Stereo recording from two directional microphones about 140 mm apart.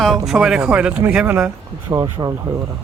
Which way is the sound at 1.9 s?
25° right (ahead or behind).